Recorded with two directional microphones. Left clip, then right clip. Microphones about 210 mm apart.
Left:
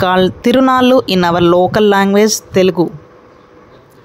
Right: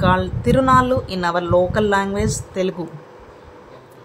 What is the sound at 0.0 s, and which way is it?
A woman's voice, 45° left (ahead or behind).